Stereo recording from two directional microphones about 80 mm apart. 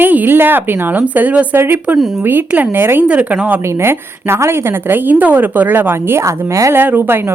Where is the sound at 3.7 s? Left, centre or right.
Right.